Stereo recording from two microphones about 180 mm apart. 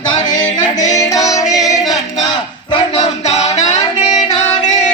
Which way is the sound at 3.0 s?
35° left (ahead or behind).